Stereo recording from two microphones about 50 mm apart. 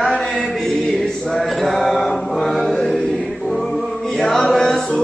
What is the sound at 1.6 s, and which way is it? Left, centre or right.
Mantra, centre.